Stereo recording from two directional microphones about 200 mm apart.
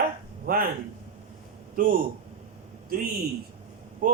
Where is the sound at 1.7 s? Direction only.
45° right (ahead or behind).